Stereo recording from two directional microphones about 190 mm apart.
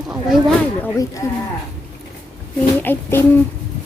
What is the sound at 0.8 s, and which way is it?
Speech, 15° left (ahead or behind).